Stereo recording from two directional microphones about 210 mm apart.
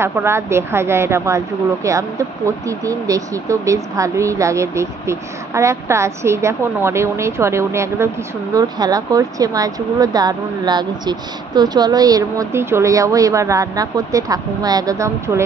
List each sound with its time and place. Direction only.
0.0 s a woman's voice: 10° right (ahead or behind)